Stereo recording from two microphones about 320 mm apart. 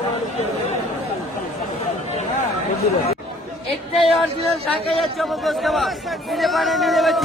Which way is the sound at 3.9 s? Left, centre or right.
Centre.